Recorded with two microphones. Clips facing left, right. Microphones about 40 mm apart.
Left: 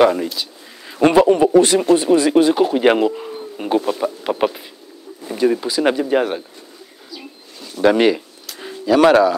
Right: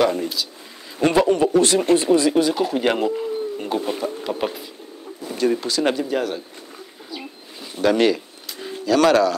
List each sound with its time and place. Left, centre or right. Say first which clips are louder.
0.4 s a man's voice: even; centre
3.1 s speech: right 3 dB; centre
5.3 s a man's voice: left 3 dB; centre
6.0 s speech: left 6 dB; left
7.8 s speech: left 4 dB; centre